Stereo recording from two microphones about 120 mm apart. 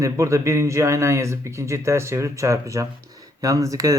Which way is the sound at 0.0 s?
25° right (ahead or behind).